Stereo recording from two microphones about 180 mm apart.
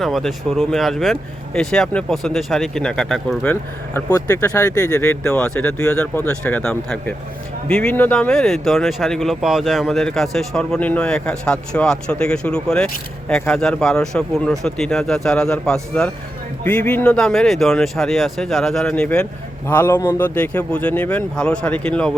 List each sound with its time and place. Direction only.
0.0 s speech: centre (ahead or behind); by 5.1 s 15° left (ahead or behind)
5.2 s speech: 5° left (ahead or behind)